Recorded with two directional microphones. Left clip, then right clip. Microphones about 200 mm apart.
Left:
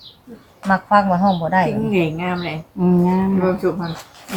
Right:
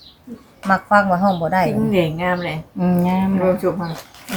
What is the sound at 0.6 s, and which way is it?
A woman's voice, 25° right (ahead or behind).